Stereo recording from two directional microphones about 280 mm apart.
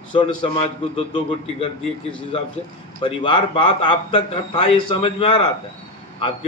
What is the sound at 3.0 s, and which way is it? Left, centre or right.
A man's voice, centre.